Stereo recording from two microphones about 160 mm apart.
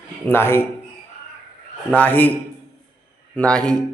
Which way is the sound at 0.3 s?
15° left (ahead or behind).